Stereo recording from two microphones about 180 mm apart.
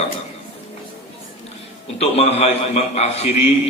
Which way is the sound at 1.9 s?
35° left (ahead or behind).